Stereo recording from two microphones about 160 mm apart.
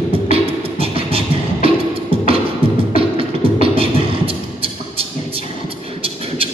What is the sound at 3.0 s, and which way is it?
Beatboxing, 35° right (ahead or behind).